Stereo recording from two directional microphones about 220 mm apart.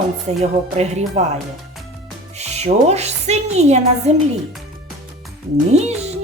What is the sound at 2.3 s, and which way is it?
Speech, 30° right (ahead or behind).